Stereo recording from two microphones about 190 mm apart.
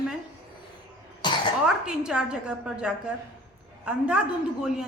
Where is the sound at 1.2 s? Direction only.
25° left (ahead or behind).